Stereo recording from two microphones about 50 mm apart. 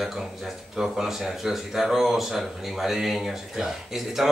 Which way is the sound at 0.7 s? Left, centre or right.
Centre.